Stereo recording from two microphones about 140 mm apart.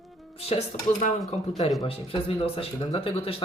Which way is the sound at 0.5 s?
45° left (ahead or behind).